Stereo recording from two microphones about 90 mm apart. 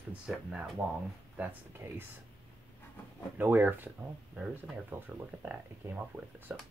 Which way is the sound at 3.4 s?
20° right (ahead or behind).